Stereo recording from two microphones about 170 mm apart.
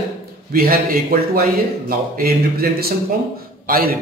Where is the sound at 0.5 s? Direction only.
60° right (ahead or behind).